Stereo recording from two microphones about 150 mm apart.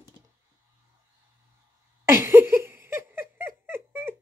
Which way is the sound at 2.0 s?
15° right (ahead or behind).